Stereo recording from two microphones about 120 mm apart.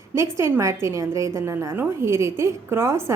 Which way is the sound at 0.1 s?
25° right (ahead or behind).